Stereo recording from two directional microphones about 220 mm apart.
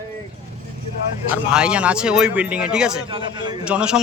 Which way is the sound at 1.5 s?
5° right (ahead or behind).